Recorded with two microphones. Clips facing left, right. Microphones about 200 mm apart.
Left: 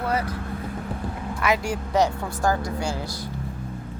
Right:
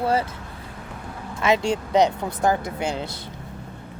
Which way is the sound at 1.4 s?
25° right (ahead or behind).